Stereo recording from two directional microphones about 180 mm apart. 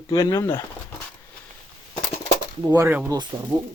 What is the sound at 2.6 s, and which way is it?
Speech, 15° right (ahead or behind).